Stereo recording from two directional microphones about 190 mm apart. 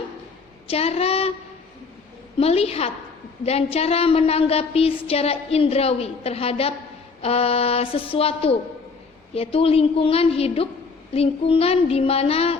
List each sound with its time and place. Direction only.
0.7 s a woman's voice: 30° left (ahead or behind)
2.4 s a woman's voice: 30° left (ahead or behind)